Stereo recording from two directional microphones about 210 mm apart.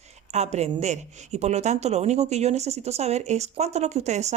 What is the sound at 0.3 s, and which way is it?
Speech, 30° right (ahead or behind).